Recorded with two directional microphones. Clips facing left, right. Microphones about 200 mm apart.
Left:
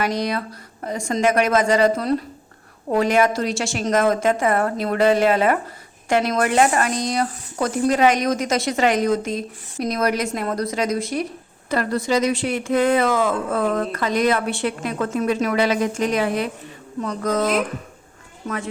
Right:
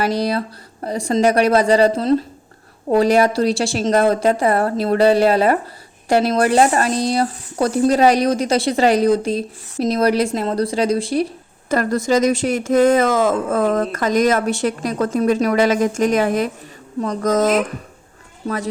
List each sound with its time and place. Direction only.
0.0 s speech: 35° right (ahead or behind)
11.7 s speech: 45° right (ahead or behind)